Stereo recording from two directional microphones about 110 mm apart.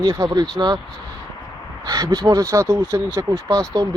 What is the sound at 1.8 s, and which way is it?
Speech, 40° right (ahead or behind).